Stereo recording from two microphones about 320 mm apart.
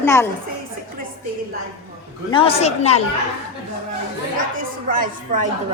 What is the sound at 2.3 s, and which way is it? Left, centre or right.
Speech, centre.